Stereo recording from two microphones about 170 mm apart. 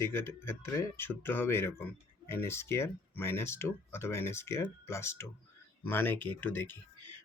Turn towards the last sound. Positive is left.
turn(degrees=10)  # may be behind; listen again after turning